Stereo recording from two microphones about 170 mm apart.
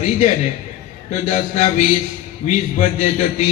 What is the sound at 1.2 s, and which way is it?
A man's voice, 40° left (ahead or behind).